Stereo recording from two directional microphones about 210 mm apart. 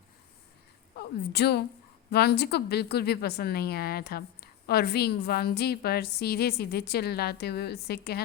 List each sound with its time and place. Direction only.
0.9 s a woman's voice: 50° left (ahead or behind)